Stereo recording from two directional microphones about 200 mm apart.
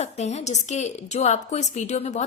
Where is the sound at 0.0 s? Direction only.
35° left (ahead or behind).